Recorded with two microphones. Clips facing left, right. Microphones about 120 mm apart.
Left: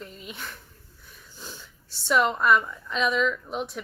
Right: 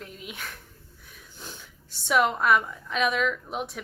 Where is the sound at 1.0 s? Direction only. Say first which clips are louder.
Even; 55° right (ahead or behind).